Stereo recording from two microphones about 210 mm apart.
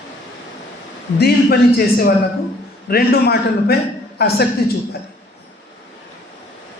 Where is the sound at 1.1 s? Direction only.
50° left (ahead or behind).